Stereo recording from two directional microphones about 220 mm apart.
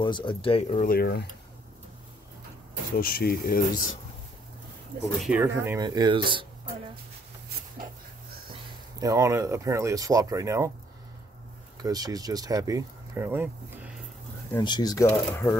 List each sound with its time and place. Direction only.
0.0 s speech: 20° left (ahead or behind); by 1.2 s 45° left (ahead or behind)
3.0 s speech: 45° left (ahead or behind)
5.2 s speech: 10° right (ahead or behind)
9.0 s speech: 15° right (ahead or behind)
11.8 s speech: 15° right (ahead or behind)
14.5 s speech: 20° left (ahead or behind)